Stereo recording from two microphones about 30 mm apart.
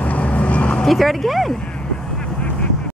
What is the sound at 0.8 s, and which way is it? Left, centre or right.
Speech, centre.